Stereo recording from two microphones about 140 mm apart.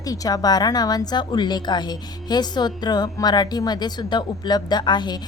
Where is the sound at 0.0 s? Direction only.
25° left (ahead or behind).